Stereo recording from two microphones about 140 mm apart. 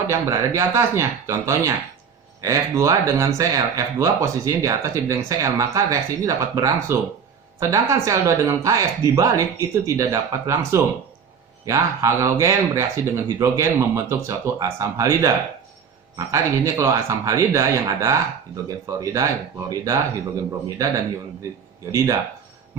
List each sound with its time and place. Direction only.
0.1 s speech: 20° right (ahead or behind)
21.9 s speech: 20° right (ahead or behind)